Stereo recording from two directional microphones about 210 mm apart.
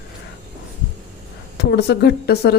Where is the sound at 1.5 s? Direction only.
50° left (ahead or behind).